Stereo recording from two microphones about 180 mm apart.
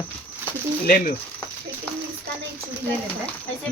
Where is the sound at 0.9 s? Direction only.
50° left (ahead or behind).